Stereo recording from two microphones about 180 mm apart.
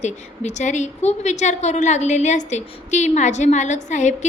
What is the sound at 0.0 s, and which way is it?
A woman's voice, 40° left (ahead or behind).